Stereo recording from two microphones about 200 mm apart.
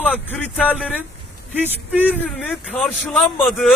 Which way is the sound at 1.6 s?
10° right (ahead or behind).